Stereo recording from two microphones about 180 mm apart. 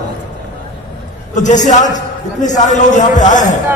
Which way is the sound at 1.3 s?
40° left (ahead or behind).